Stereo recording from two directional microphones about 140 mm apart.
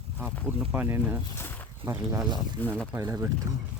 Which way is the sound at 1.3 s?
15° left (ahead or behind).